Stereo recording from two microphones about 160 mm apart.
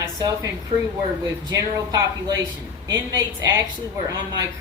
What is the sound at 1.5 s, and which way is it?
Speech, 25° right (ahead or behind).